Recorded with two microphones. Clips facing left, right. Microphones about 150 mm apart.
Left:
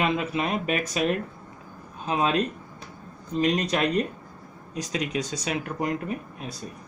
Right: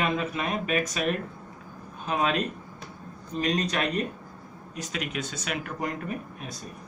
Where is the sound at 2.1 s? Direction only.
30° left (ahead or behind).